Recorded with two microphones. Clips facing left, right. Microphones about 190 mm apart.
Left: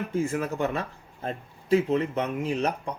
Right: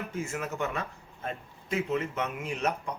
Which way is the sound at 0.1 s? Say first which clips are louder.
Left 7 dB; 30° left (ahead or behind).